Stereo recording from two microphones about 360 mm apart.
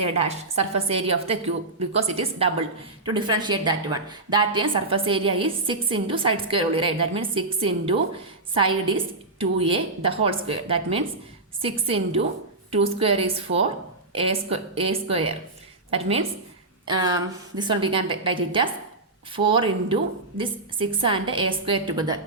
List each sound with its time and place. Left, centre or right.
0.0 s a woman's voice: centre
9.4 s a woman's voice: centre